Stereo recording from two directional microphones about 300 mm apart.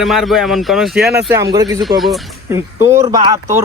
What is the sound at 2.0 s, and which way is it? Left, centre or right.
Speech, centre.